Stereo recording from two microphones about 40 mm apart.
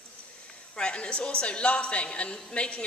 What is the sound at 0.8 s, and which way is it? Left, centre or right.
A woman's voice, left.